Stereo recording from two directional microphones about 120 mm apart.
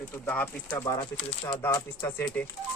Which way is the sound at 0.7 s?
30° left (ahead or behind).